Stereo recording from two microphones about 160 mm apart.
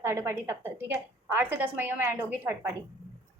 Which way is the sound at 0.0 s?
15° right (ahead or behind).